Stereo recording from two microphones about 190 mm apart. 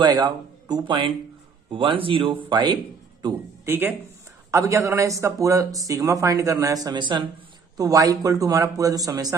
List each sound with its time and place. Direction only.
0.0 s a man's voice: 20° right (ahead or behind)